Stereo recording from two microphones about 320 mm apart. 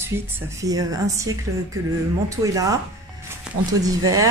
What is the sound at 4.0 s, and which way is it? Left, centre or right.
Speech, right.